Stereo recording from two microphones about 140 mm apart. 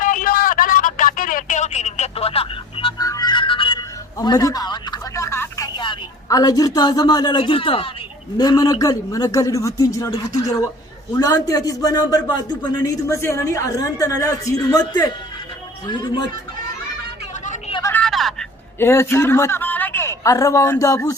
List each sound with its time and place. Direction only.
0.0 s telephone: 75° left (ahead or behind); by 2.9 s 40° left (ahead or behind)
3.0 s music: 25° left (ahead or behind)
8.4 s a man's voice: 30° left (ahead or behind)
18.0 s vehicle: centre (ahead or behind)
18.8 s a woman's voice: 20° left (ahead or behind)